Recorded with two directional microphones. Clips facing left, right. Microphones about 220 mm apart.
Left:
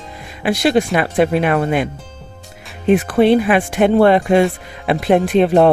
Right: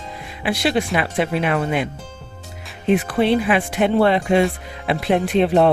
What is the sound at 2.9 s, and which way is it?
Speech, 50° left (ahead or behind).